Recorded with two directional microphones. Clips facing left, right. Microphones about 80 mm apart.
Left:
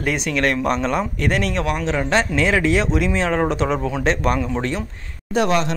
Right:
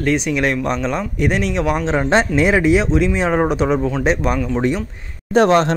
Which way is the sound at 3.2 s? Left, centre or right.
Centre.